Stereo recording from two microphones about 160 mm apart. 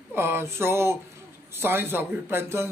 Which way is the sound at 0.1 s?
15° right (ahead or behind).